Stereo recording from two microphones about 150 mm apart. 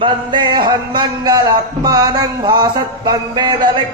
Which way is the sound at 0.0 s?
30° right (ahead or behind).